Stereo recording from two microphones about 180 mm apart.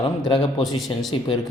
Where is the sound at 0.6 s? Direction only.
Centre (ahead or behind).